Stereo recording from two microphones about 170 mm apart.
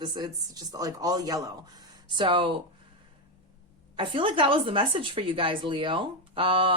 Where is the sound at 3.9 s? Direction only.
30° right (ahead or behind).